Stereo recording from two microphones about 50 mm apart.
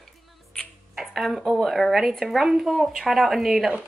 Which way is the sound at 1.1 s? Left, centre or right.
Centre.